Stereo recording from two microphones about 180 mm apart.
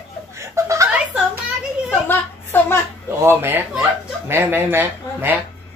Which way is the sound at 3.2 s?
15° right (ahead or behind).